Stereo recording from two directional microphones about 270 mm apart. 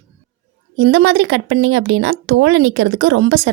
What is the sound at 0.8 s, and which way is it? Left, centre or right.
A woman's voice, right.